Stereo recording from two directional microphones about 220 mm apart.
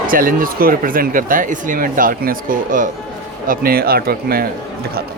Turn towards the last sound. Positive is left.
turn(degrees=-45)  # may be behind; listen again after turning